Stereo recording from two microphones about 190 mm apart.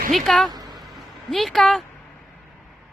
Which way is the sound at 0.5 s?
20° right (ahead or behind).